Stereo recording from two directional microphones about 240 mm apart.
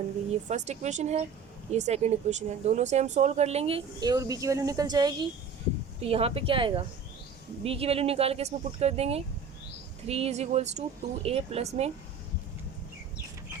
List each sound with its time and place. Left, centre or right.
0.4 s speech: right